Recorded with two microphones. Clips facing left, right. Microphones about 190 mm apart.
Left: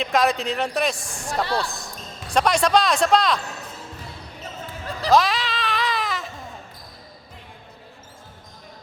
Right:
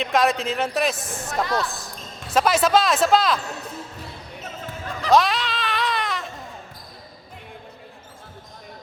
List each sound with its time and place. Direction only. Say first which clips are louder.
0.0 s a man's voice: even; centre (ahead or behind)
1.5 s speech: right 2 dB; 30° left (ahead or behind)
2.3 s a man's voice: even; 5° right (ahead or behind)
5.1 s baby cry: even; centre (ahead or behind)